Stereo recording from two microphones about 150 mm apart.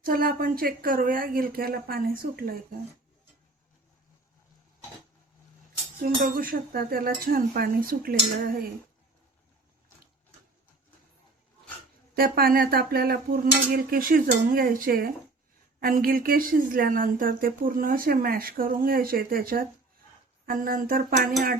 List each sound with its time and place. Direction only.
0.0 s speech: 75° right (ahead or behind)
6.0 s speech: 70° right (ahead or behind)
12.1 s dishes: 80° right
15.8 s speech: 75° right (ahead or behind)